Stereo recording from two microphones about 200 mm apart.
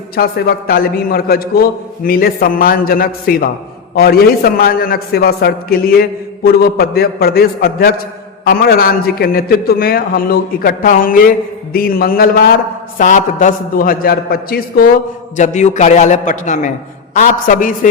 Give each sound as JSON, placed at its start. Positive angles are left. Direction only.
{"t": 0.2, "sound": "a man's voice", "side_deg": 50}
{"t": 15.4, "sound": "a man's voice", "side_deg": 35}